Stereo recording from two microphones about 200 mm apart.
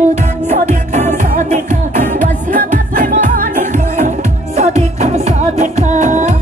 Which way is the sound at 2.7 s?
40° right (ahead or behind).